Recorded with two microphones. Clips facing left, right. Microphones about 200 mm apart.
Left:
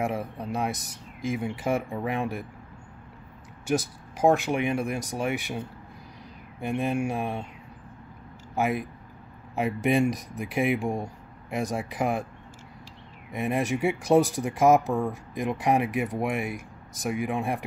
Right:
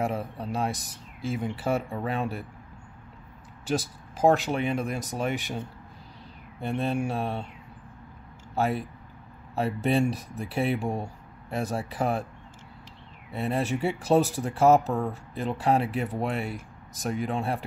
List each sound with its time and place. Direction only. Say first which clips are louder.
0.0 s speech: even; 15° left (ahead or behind)
3.6 s speech: left 2 dB; 15° left (ahead or behind)
8.5 s speech: even; 15° left (ahead or behind)
13.3 s speech: left 1 dB; 15° left (ahead or behind)